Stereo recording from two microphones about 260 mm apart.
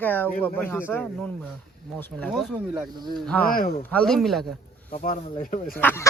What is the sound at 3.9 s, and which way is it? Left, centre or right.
Speech, centre.